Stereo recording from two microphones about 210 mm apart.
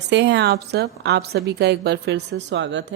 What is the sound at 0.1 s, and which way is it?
A woman's voice, 55° right (ahead or behind).